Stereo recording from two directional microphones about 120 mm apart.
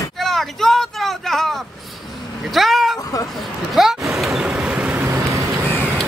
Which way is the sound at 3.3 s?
Centre (ahead or behind).